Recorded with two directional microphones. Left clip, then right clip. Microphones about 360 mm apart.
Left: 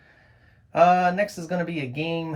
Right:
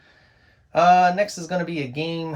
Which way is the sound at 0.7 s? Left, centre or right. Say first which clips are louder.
Right 3 dB; centre.